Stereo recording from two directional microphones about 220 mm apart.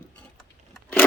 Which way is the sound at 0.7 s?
5° left (ahead or behind).